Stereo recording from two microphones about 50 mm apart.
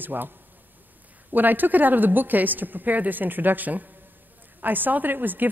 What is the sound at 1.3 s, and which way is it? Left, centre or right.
A woman's voice, right.